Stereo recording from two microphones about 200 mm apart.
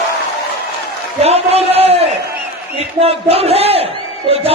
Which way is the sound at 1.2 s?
30° right (ahead or behind).